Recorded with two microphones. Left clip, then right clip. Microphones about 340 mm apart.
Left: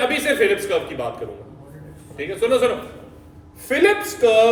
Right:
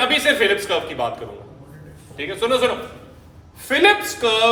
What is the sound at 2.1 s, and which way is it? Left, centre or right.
Speech, centre.